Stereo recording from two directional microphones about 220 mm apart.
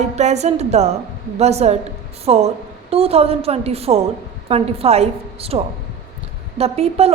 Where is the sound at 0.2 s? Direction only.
30° right (ahead or behind).